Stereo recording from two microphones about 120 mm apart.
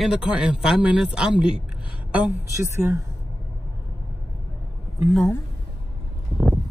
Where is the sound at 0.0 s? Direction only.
5° right (ahead or behind).